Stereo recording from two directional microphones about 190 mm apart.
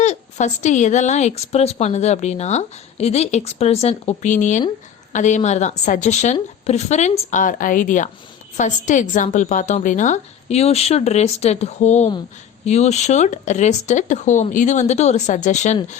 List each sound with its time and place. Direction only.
0.0 s speech: 40° left (ahead or behind)